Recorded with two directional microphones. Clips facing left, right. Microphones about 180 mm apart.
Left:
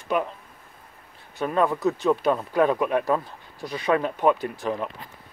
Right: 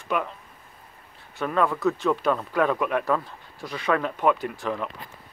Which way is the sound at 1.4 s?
25° left (ahead or behind).